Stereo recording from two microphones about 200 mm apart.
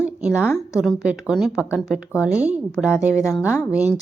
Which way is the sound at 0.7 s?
5° right (ahead or behind).